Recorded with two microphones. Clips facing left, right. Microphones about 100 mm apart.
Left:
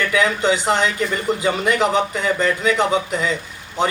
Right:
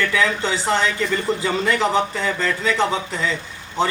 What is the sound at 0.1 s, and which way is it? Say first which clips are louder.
A man's voice: left 3 dB; 20° left (ahead or behind).